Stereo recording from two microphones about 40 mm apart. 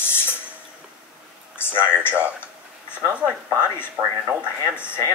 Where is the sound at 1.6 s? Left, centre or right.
Left.